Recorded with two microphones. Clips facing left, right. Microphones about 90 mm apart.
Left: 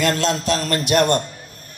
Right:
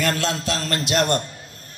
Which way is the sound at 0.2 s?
20° left (ahead or behind).